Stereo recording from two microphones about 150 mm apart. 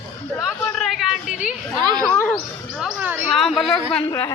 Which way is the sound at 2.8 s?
5° right (ahead or behind).